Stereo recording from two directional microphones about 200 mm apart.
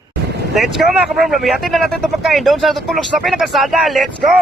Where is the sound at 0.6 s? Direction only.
Centre (ahead or behind).